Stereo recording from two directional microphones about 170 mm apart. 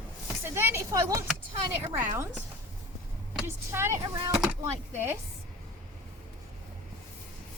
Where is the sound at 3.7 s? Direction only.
15° right (ahead or behind).